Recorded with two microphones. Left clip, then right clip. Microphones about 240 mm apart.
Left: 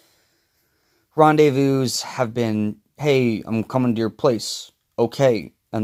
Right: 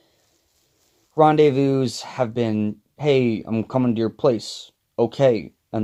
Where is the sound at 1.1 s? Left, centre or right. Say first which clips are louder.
Left 1 dB; left.